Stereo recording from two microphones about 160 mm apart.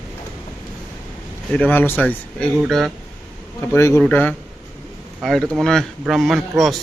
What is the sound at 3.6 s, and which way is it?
A man's voice, 15° left (ahead or behind).